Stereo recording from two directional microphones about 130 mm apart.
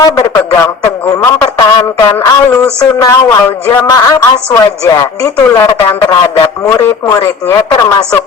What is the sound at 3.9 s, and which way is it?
A woman's voice, 30° left (ahead or behind).